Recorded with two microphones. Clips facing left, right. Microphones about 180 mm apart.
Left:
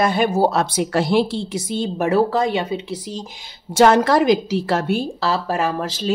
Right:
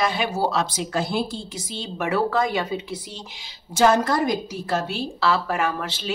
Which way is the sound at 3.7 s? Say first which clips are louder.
Left 5 dB; 75° left (ahead or behind).